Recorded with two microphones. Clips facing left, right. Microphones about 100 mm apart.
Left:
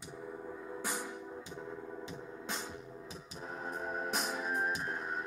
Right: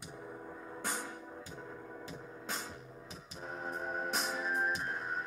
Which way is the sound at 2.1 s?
30° left (ahead or behind).